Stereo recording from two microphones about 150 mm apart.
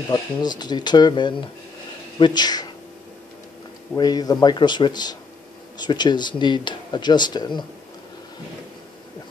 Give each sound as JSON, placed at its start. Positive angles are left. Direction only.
{"t": 0.1, "sound": "speech", "side_deg": 30}
{"t": 3.9, "sound": "speech", "side_deg": 25}